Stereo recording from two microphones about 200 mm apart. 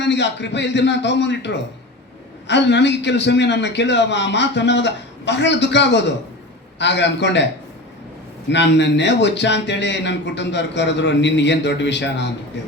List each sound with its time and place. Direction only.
0.0 s speech: 60° left (ahead or behind)
8.4 s speech: 60° left (ahead or behind)